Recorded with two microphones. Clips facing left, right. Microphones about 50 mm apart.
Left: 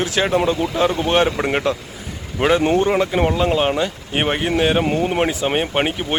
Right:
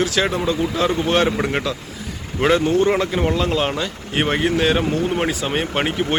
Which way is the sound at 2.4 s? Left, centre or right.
Centre.